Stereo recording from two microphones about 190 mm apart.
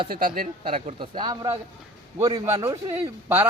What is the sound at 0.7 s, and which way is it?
A man's voice, 30° right (ahead or behind).